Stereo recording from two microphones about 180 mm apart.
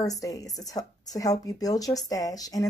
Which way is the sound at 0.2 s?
20° left (ahead or behind).